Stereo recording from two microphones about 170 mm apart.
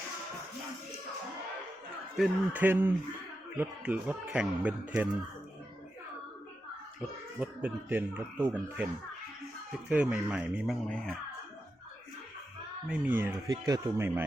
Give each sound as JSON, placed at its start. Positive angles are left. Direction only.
{"t": 2.1, "sound": "speech", "side_deg": -5}
{"t": 7.3, "sound": "speech", "side_deg": -10}
{"t": 9.9, "sound": "speech", "side_deg": -5}
{"t": 10.8, "sound": "speech", "side_deg": 5}
{"t": 12.9, "sound": "speech", "side_deg": -10}
{"t": 13.5, "sound": "speech", "side_deg": -20}